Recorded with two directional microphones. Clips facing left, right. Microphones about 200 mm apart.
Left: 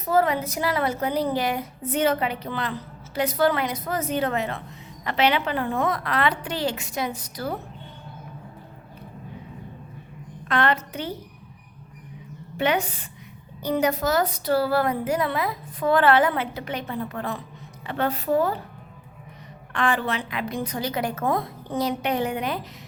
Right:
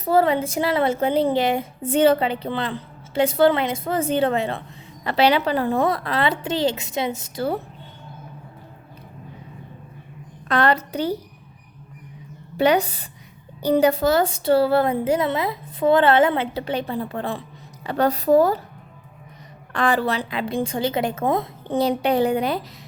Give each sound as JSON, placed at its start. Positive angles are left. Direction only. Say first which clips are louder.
{"t": 0.0, "sound": "a woman's voice", "louder": "right 3 dB", "side_deg": -30}
{"t": 10.5, "sound": "a woman's voice", "louder": "right 4 dB", "side_deg": -35}
{"t": 12.5, "sound": "a woman's voice", "louder": "right 5 dB", "side_deg": -35}
{"t": 19.7, "sound": "a woman's voice", "louder": "right 4 dB", "side_deg": -35}